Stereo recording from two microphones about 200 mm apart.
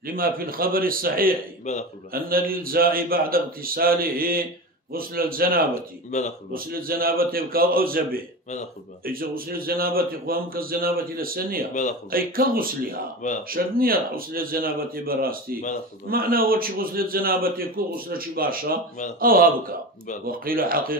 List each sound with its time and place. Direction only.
0.0 s a man's voice: 45° right (ahead or behind)
1.7 s a man's voice: 35° left (ahead or behind)
2.1 s a man's voice: 45° right (ahead or behind)